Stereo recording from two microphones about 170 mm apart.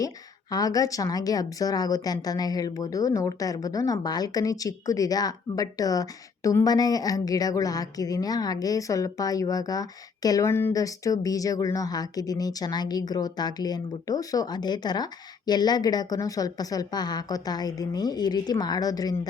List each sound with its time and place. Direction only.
0.5 s a woman's voice: 20° left (ahead or behind)